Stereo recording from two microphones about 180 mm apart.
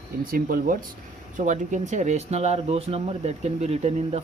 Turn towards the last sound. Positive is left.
turn(degrees=-35)  # may be behind; listen again after turning